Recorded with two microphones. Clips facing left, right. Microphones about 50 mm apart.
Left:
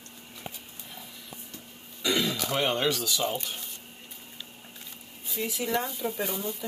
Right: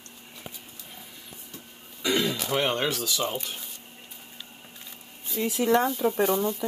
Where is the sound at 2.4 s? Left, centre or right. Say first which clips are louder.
Right 1 dB; centre.